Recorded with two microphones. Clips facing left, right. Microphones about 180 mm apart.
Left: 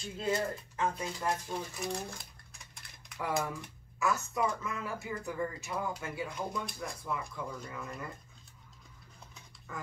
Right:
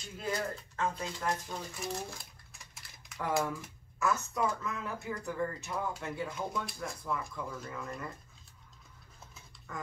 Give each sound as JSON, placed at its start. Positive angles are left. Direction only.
{"t": 0.2, "sound": "speech", "side_deg": 25}
{"t": 0.9, "sound": "speech", "side_deg": 5}